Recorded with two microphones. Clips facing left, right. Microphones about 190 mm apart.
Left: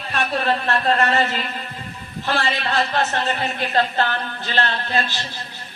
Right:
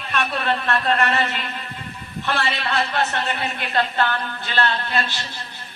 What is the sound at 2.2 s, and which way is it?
Speech, 35° left (ahead or behind).